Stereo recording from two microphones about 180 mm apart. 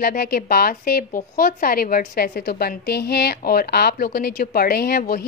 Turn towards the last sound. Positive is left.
turn(degrees=55)  # may be behind; listen again after turning